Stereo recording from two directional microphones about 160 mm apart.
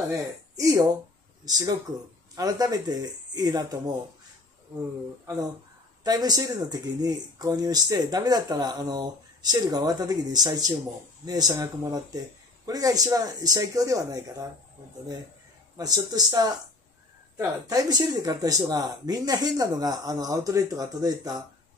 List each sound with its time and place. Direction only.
0.6 s speech: 20° right (ahead or behind)
6.0 s speech: 25° right (ahead or behind)
15.8 s speech: 25° right (ahead or behind)